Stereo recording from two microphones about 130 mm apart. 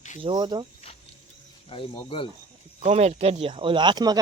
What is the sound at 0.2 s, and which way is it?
Speech, 35° right (ahead or behind).